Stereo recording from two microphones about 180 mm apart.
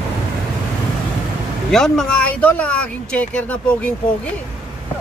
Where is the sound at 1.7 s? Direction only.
5° left (ahead or behind).